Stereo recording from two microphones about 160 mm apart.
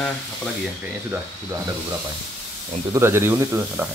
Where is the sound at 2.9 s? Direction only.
15° right (ahead or behind).